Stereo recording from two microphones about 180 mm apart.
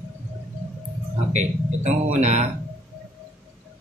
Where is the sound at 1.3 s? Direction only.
40° right (ahead or behind).